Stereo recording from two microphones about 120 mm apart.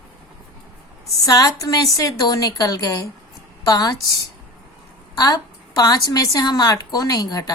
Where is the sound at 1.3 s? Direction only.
30° left (ahead or behind).